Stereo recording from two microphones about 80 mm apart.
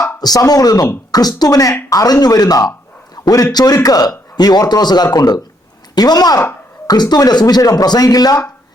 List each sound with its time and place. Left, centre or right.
0.2 s a man's voice: left